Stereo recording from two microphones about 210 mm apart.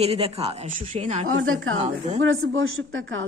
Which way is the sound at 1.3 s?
80° right.